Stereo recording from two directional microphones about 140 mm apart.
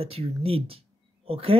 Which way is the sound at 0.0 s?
45° right (ahead or behind).